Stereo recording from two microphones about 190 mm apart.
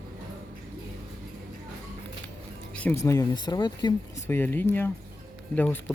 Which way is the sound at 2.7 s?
10° left (ahead or behind).